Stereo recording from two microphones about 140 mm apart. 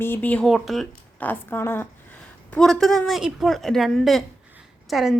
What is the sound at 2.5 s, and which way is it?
A woman's voice, 5° left (ahead or behind).